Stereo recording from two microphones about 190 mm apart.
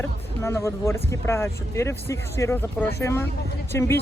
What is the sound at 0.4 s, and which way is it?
Speech, 15° left (ahead or behind).